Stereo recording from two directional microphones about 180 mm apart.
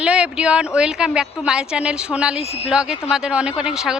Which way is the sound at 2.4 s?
35° left (ahead or behind).